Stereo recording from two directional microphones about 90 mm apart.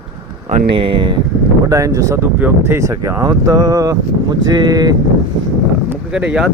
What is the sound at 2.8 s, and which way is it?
Speech, 35° right (ahead or behind).